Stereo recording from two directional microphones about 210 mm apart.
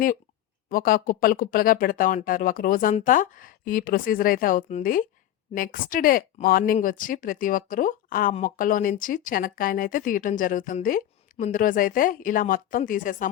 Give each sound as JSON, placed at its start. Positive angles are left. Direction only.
{"t": 0.7, "sound": "speech", "side_deg": 40}